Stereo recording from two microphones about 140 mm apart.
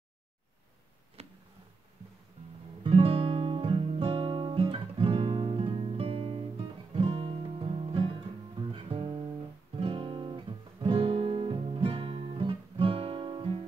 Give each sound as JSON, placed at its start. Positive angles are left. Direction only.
{"t": 1.2, "sound": "a sound", "side_deg": -50}
{"t": 2.8, "sound": "guitar", "side_deg": -40}
{"t": 8.7, "sound": "music", "side_deg": -40}
{"t": 9.8, "sound": "guitar", "side_deg": -40}